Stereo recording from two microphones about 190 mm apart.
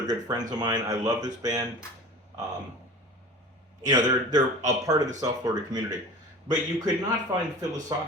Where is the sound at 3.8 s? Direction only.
20° right (ahead or behind).